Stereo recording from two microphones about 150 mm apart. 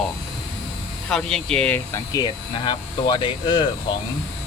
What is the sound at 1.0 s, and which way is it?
Speech, 5° left (ahead or behind).